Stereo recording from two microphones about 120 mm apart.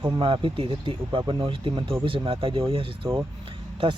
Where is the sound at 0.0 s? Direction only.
45° right (ahead or behind).